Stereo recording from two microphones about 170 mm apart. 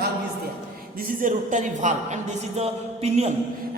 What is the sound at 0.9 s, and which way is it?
A man's voice, 50° right (ahead or behind).